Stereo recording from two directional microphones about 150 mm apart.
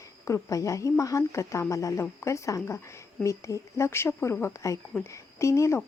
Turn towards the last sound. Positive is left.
turn(degrees=20)  # may be behind; listen again after turning